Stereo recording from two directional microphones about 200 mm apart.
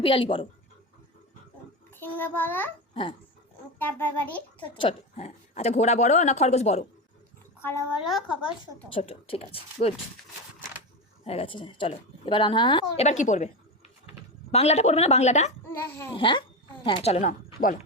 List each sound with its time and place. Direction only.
0.0 s a woman's voice: 25° left (ahead or behind)
2.0 s a child's voice: 10° left (ahead or behind)
2.9 s speech: 25° left (ahead or behind)
3.8 s a child's voice: 10° left (ahead or behind)
4.8 s speech: 30° left (ahead or behind)
8.0 s speech: centre (ahead or behind)
8.4 s a woman's voice: 25° left (ahead or behind)
11.3 s a woman's voice: 25° left (ahead or behind)
13.1 s speech: 35° left (ahead or behind)
14.5 s speech: 35° left (ahead or behind)
16.1 s a woman's voice: 25° left (ahead or behind)